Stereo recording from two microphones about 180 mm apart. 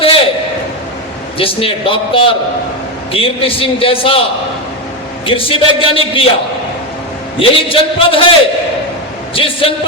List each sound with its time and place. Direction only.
0.0 s a sound: 30° left (ahead or behind)
1.4 s a man's voice: 30° left (ahead or behind)
7.3 s a man's voice: 30° left (ahead or behind)